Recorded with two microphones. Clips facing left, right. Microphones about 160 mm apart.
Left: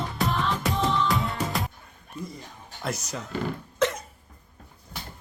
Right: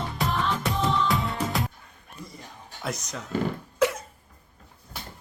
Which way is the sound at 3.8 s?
10° right (ahead or behind).